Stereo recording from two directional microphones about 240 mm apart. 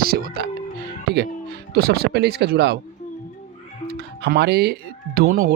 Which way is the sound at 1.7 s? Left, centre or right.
Right.